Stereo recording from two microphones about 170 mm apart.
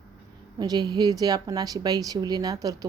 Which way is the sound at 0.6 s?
25° right (ahead or behind).